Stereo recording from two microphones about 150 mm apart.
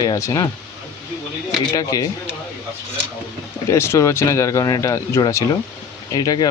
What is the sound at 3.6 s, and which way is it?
Speech, 20° left (ahead or behind).